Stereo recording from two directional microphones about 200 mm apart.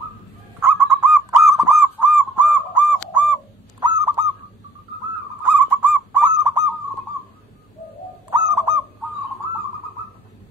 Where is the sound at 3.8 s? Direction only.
20° right (ahead or behind).